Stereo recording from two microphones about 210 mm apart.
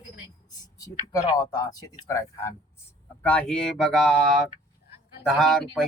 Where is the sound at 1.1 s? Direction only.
15° left (ahead or behind).